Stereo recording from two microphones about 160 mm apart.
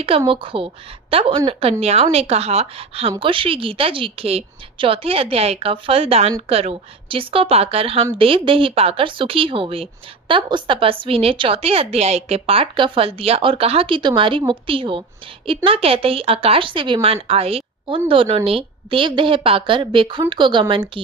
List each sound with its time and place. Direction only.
0.3 s a woman's voice: 35° right (ahead or behind)